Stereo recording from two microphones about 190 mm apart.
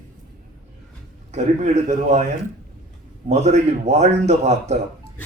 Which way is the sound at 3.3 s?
35° right (ahead or behind).